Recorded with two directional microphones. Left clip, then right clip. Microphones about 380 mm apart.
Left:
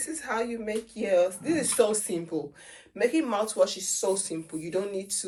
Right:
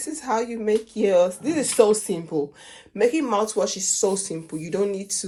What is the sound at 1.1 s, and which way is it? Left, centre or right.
Speech, right.